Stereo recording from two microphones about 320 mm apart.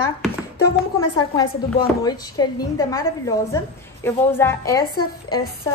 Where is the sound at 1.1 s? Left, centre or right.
Centre.